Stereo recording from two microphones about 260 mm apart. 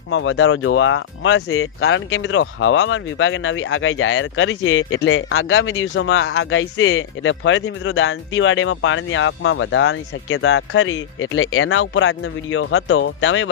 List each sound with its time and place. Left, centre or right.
0.1 s speech: left